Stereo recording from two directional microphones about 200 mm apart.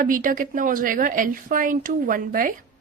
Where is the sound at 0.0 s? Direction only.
45° right (ahead or behind).